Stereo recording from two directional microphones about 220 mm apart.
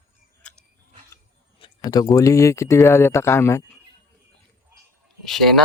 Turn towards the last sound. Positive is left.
turn(degrees=0)  # may be behind; listen again after turning